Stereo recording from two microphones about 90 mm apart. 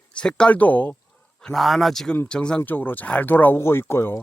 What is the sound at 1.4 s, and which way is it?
Speech, 5° left (ahead or behind).